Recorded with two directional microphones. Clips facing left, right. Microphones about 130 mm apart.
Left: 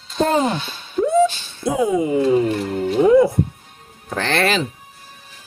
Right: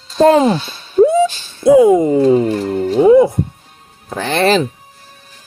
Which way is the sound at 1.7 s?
60° right (ahead or behind).